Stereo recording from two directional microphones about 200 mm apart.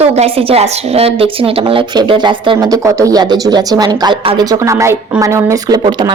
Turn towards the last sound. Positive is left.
turn(degrees=-20)  # may be behind; listen again after turning